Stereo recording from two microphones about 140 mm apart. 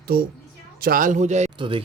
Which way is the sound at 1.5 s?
35° right (ahead or behind).